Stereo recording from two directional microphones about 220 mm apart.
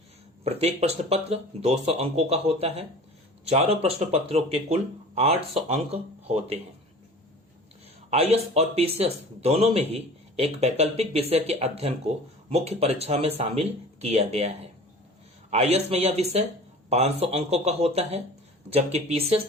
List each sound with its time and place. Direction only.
0.4 s a man's voice: 30° right (ahead or behind)
8.1 s a man's voice: 30° right (ahead or behind)